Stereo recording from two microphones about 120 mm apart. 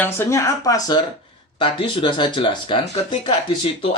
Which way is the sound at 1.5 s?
45° left (ahead or behind).